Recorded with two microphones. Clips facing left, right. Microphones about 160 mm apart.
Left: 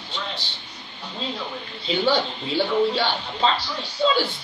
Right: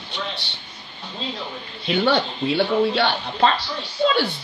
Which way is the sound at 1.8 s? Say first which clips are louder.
Right 2 dB; 65° right (ahead or behind).